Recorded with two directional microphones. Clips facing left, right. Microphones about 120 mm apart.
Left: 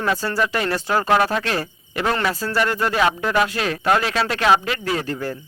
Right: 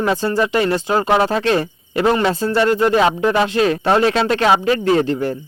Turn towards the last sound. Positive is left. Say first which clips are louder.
# right 6 dB
turn(degrees=-20)  # may be behind; listen again after turning